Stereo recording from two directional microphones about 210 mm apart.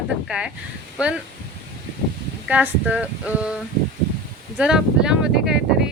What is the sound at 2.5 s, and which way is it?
A woman's voice, 5° right (ahead or behind).